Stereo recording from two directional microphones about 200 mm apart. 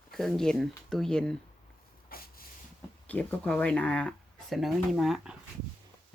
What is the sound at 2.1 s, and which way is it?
Vehicle, 50° left (ahead or behind).